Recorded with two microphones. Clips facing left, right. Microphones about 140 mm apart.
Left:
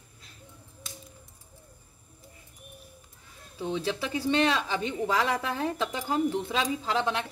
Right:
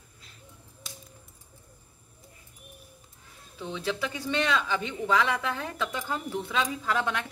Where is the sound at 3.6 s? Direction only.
30° left (ahead or behind).